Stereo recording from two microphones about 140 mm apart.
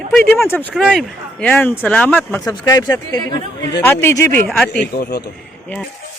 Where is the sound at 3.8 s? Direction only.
15° left (ahead or behind).